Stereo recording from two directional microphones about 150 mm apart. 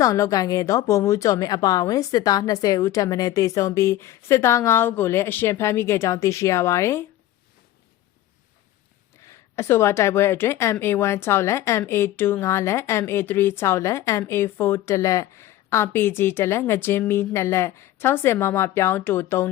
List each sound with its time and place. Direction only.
0.0 s a woman's voice: 20° left (ahead or behind)
9.2 s a woman's voice: 20° left (ahead or behind)